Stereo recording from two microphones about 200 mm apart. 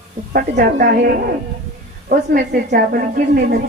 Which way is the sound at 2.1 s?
50° right (ahead or behind).